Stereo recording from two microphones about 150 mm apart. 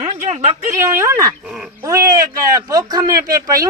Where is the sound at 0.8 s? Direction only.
20° right (ahead or behind).